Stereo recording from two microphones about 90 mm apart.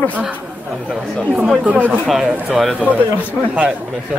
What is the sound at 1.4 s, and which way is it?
Speech, 15° right (ahead or behind).